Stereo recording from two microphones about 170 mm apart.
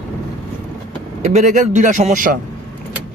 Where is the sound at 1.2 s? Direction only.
40° right (ahead or behind).